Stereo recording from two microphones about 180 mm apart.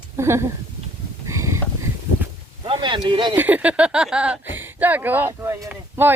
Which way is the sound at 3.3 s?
10° right (ahead or behind).